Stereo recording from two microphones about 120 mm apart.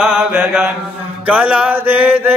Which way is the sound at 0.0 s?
10° right (ahead or behind).